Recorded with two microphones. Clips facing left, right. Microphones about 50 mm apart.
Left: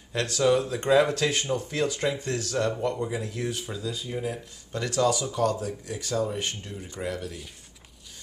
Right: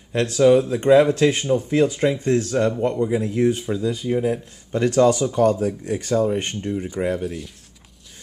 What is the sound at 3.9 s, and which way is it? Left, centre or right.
Speech, right.